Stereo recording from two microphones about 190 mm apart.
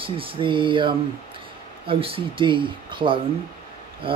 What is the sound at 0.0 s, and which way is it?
Speech, 25° right (ahead or behind).